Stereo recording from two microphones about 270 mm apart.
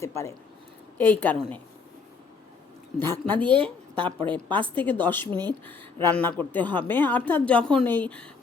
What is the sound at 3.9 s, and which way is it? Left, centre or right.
Speech, centre.